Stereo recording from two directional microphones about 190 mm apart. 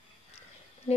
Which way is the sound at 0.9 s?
30° left (ahead or behind).